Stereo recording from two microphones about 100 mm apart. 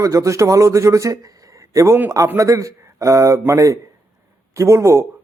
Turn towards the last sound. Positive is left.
turn(degrees=-30)  # may be behind; listen again after turning